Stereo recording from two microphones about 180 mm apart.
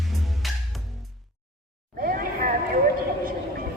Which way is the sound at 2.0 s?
55° right (ahead or behind).